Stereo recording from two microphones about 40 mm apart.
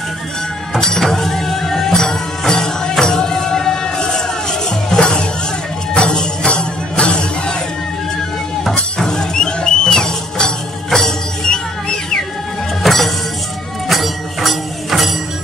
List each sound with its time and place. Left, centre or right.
0.7 s music: centre
8.9 s music: centre
12.8 s music: centre